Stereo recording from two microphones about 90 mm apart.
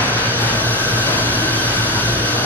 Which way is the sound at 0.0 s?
20° left (ahead or behind).